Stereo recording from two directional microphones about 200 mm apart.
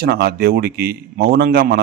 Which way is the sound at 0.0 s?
50° right (ahead or behind).